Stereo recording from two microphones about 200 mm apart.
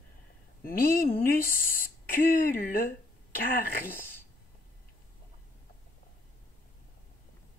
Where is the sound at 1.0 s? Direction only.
45° left (ahead or behind).